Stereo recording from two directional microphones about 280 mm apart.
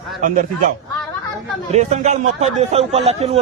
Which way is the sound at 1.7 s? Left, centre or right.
Right.